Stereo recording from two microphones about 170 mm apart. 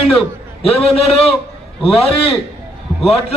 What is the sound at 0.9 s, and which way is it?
A man's voice, 35° left (ahead or behind).